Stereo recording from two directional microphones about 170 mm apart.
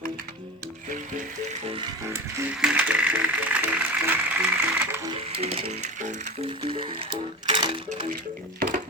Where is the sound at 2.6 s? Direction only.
10° right (ahead or behind).